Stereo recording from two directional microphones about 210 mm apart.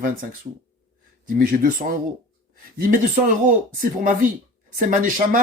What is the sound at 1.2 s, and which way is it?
Speech, 40° right (ahead or behind).